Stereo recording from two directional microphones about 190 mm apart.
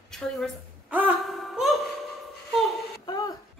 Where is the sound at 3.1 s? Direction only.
20° left (ahead or behind).